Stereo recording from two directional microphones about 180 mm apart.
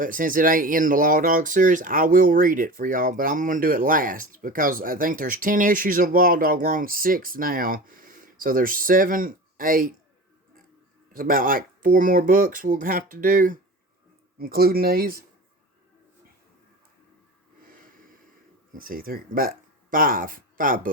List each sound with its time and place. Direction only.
0.0 s speech: 50° right (ahead or behind)
11.1 s speech: 50° right (ahead or behind)
18.8 s speech: 55° right (ahead or behind)